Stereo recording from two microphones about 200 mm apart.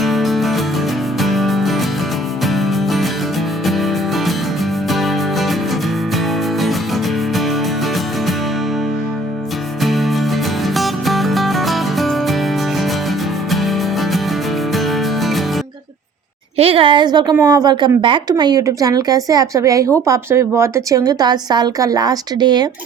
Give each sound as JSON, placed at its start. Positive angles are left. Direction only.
{"t": 0.0, "sound": "music", "side_deg": 0}
{"t": 6.6, "sound": "music", "side_deg": 0}
{"t": 9.8, "sound": "music", "side_deg": 0}
{"t": 13.5, "sound": "music", "side_deg": 0}
{"t": 16.6, "sound": "a sound", "side_deg": -30}
{"t": 17.3, "sound": "a woman's voice", "side_deg": -20}